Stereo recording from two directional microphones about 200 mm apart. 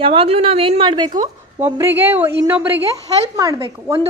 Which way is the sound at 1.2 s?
10° right (ahead or behind).